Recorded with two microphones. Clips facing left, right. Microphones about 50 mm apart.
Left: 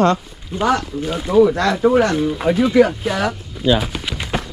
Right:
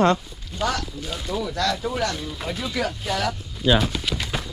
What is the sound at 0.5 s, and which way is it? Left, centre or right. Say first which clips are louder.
Speech: left 8 dB; left.